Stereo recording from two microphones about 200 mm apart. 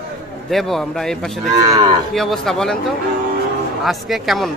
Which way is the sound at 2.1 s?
Centre (ahead or behind).